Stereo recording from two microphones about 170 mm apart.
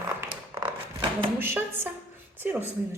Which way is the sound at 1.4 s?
15° right (ahead or behind).